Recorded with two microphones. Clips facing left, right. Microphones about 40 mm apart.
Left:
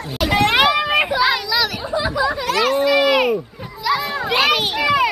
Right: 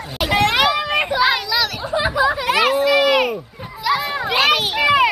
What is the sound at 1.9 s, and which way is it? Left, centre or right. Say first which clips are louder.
Speech: right 3 dB; centre.